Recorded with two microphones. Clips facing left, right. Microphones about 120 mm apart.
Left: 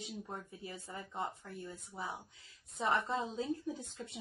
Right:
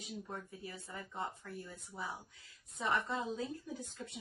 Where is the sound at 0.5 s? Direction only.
25° left (ahead or behind).